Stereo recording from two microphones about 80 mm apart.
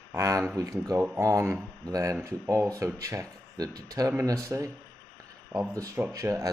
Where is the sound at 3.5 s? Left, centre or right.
Right.